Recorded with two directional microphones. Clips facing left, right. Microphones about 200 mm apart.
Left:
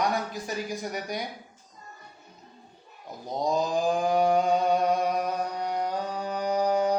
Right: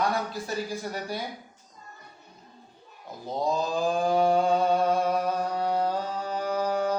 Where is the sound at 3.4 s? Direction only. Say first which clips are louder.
Left 1 dB; 15° left (ahead or behind).